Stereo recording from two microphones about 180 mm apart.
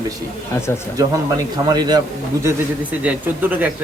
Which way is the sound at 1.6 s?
25° right (ahead or behind).